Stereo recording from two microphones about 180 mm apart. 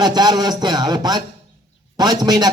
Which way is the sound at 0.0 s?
20° right (ahead or behind).